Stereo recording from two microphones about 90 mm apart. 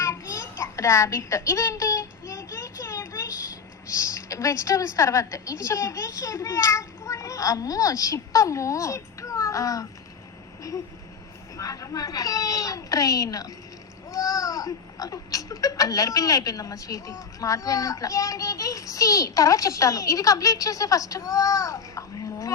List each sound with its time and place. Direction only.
0.0 s child singing: 35° left (ahead or behind)
3.8 s a woman's voice: 35° left (ahead or behind)
11.5 s speech: 40° left (ahead or behind)